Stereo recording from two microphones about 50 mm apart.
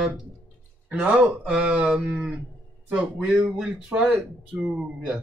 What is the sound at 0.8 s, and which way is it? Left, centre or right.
Speech, right.